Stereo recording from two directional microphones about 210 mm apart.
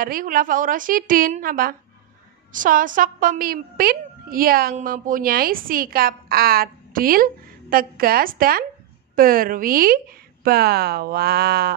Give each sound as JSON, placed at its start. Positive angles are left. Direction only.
{"t": 0.0, "sound": "a woman's voice", "side_deg": -40}